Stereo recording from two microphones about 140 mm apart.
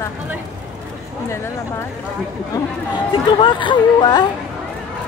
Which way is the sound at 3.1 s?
35° left (ahead or behind).